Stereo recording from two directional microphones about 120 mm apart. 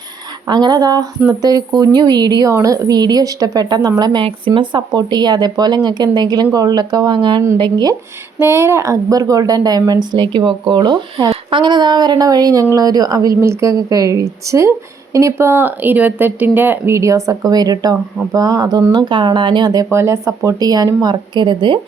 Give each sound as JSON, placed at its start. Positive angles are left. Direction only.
{"t": 0.4, "sound": "speech", "side_deg": -35}
{"t": 8.4, "sound": "speech", "side_deg": -20}